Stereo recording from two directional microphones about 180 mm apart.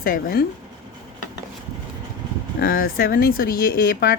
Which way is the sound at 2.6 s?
55° left (ahead or behind).